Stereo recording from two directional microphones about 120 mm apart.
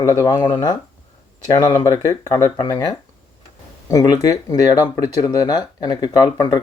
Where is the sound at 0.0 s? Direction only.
25° left (ahead or behind).